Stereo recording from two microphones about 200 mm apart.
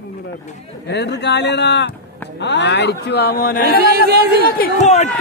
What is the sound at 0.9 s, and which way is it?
Speech, 60° left (ahead or behind).